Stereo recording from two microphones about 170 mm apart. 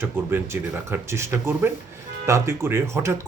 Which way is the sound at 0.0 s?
15° right (ahead or behind).